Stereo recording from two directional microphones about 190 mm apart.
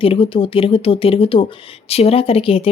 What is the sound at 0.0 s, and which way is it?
Speech, 30° left (ahead or behind).